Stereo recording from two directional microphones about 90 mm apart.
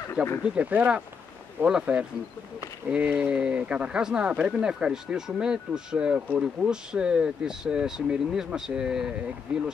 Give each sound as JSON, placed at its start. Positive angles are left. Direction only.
{"t": 0.4, "sound": "speech", "side_deg": -15}